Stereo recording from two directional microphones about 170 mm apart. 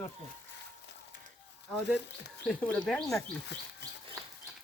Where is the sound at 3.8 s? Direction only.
90° left.